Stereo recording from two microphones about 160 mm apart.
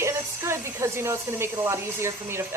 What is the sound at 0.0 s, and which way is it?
Speech, 15° right (ahead or behind).